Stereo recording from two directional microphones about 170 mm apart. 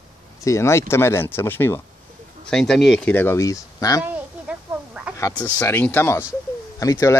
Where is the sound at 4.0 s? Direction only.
10° right (ahead or behind).